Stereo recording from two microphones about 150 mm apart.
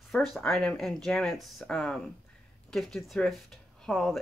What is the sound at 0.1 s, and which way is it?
Speech, centre (ahead or behind).